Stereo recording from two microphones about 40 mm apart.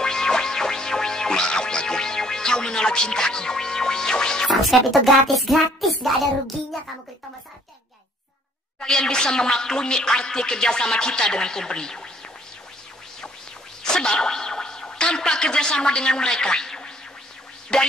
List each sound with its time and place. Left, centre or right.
0.0 s music: centre
4.5 s music: centre
8.7 s music: centre
13.8 s speech: centre
17.7 s music: centre